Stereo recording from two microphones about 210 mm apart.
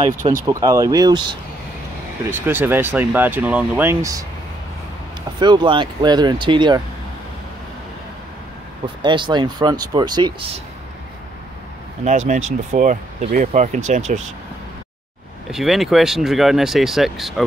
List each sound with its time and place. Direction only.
0.5 s speech: 15° right (ahead or behind)
2.3 s speech: 10° right (ahead or behind)
5.4 s speech: 20° right (ahead or behind)
9.0 s speech: 20° right (ahead or behind)
12.3 s speech: 35° right (ahead or behind)
15.5 s speech: centre (ahead or behind)